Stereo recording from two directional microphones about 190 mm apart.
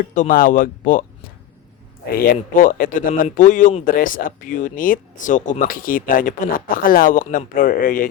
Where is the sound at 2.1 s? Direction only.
50° left (ahead or behind).